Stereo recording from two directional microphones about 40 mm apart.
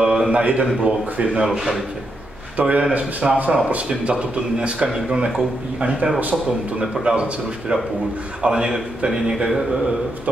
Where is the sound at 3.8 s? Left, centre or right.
Right.